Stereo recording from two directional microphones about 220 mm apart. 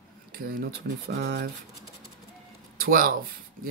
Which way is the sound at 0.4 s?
40° right (ahead or behind).